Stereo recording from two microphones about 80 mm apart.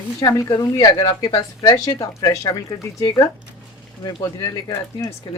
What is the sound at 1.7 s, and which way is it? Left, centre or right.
Speech, left.